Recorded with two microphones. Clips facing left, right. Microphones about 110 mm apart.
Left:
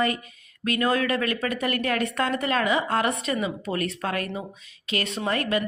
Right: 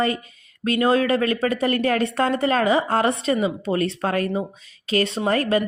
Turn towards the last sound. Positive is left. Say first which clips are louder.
# right 5 dB
turn(degrees=-35)  # may be behind; listen again after turning